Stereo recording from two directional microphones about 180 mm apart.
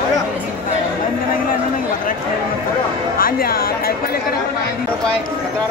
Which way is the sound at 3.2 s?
55° left (ahead or behind).